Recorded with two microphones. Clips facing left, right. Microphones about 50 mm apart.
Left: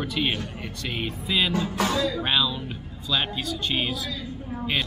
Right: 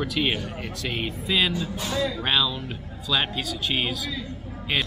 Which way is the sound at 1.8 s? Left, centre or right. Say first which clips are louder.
Left 3 dB; left.